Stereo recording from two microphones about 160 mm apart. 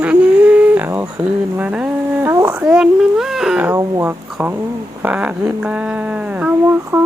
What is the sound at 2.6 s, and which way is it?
Speech, 5° right (ahead or behind).